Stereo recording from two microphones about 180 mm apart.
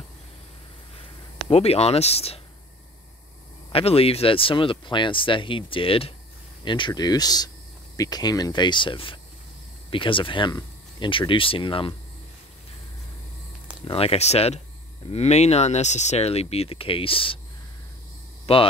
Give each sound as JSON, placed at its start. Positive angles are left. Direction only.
{"t": 1.5, "sound": "speech", "side_deg": 35}
{"t": 3.7, "sound": "speech", "side_deg": 30}
{"t": 13.8, "sound": "speech", "side_deg": 35}
{"t": 18.5, "sound": "speech", "side_deg": 35}